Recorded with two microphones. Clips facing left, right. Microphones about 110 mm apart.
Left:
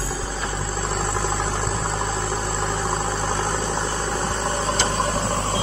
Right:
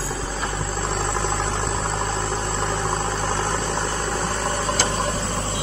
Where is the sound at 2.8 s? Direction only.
15° left (ahead or behind).